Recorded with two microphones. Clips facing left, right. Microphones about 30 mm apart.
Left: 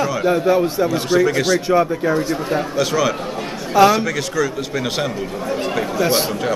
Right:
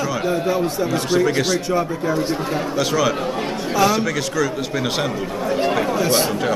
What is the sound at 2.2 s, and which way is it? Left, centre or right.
Speech, right.